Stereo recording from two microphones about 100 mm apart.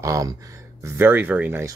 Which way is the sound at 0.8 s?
20° right (ahead or behind).